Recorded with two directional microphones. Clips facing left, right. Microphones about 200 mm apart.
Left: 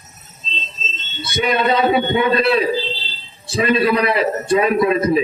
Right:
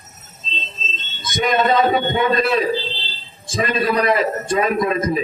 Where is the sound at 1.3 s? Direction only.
40° right (ahead or behind).